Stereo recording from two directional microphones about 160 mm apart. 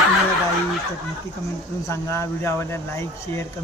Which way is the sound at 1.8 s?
15° left (ahead or behind).